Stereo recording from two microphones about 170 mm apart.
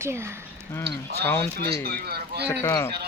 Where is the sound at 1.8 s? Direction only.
70° right (ahead or behind).